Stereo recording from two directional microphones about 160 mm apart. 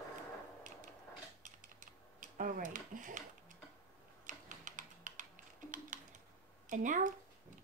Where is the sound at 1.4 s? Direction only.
55° right (ahead or behind).